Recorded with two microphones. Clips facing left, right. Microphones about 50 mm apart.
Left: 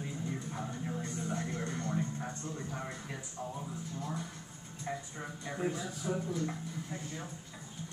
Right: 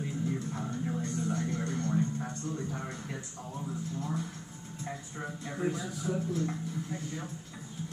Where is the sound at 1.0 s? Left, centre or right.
Centre.